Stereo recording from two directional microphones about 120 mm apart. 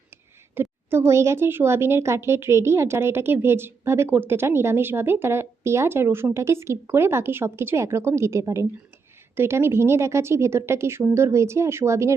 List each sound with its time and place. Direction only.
0.5 s a woman's voice: 20° right (ahead or behind)